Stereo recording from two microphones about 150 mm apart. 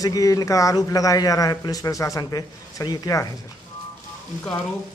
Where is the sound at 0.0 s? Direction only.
25° left (ahead or behind).